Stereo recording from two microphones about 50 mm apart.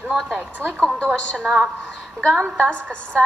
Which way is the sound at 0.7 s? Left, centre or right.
Left.